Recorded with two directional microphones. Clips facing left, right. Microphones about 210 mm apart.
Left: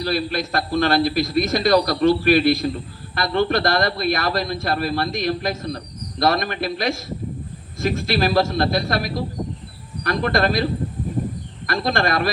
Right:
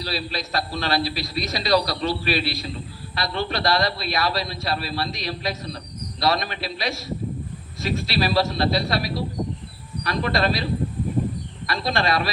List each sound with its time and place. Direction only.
0.0 s a man's voice: 50° left (ahead or behind)